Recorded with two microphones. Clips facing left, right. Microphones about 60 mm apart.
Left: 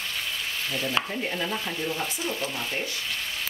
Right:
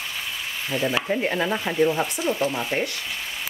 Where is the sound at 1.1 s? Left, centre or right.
Right.